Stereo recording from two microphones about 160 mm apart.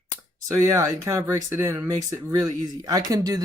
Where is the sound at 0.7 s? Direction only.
15° right (ahead or behind).